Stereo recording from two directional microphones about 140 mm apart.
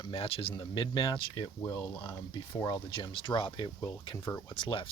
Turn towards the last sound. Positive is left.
turn(degrees=35)  # may be behind; listen again after turning